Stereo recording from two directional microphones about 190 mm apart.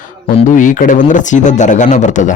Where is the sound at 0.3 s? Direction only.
45° left (ahead or behind).